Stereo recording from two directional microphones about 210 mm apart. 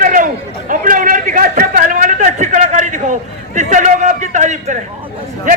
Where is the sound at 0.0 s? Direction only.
40° right (ahead or behind).